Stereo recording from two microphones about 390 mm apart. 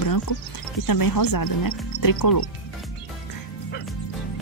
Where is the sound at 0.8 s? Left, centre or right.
Left.